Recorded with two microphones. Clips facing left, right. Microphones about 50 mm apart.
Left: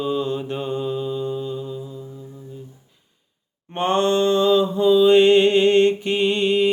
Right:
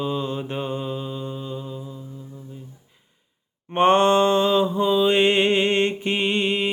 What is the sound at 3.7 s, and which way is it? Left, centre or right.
Mantra, right.